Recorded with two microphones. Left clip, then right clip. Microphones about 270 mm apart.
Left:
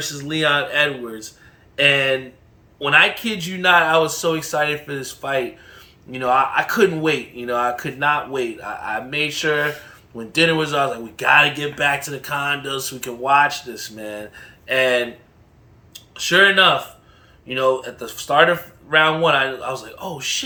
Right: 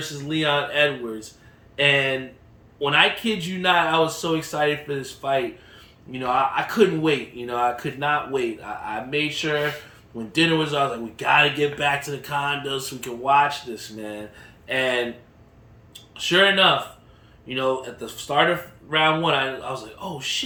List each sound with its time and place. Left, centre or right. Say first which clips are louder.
0.3 s speech: left 4 dB; centre
16.2 s speech: left 4 dB; centre